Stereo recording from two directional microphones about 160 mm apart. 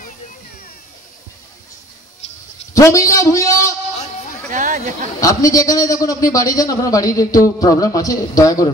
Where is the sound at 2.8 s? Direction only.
20° left (ahead or behind).